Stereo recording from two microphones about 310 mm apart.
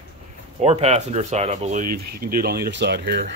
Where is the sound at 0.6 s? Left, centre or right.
Right.